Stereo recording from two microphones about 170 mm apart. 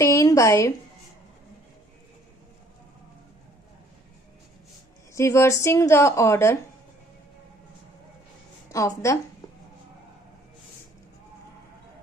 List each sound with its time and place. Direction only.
0.0 s a sound: 20° left (ahead or behind)
5.1 s a woman's voice: 15° left (ahead or behind)
8.7 s a woman's voice: 20° left (ahead or behind)